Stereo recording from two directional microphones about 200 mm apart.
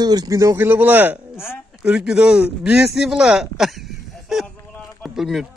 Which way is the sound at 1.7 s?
5° right (ahead or behind).